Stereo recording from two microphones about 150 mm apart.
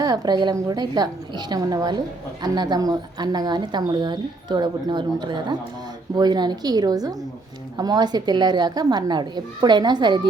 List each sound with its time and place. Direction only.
0.0 s a woman's voice: 25° right (ahead or behind)